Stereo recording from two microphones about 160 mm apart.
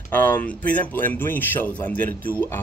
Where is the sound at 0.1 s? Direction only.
10° left (ahead or behind).